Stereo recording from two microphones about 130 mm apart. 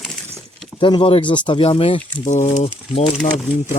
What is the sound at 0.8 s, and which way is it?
Speech, 40° left (ahead or behind).